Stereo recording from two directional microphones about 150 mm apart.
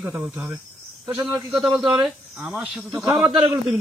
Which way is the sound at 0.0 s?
20° right (ahead or behind).